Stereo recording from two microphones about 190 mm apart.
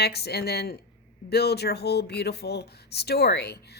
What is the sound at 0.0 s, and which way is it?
Speech, 60° left (ahead or behind).